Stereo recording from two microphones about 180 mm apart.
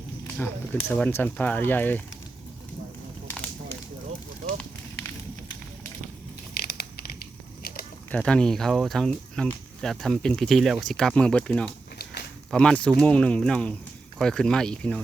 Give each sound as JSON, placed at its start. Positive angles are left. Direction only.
{"t": 0.3, "sound": "speech", "side_deg": 10}
{"t": 6.6, "sound": "crumpling", "side_deg": 55}
{"t": 7.6, "sound": "a sound", "side_deg": 55}
{"t": 8.1, "sound": "speech", "side_deg": 5}